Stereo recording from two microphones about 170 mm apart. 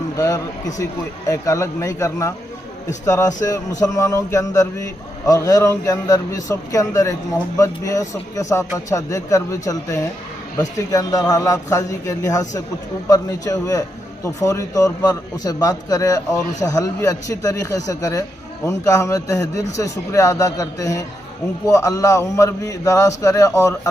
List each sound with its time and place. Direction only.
1.3 s a man's voice: 20° left (ahead or behind)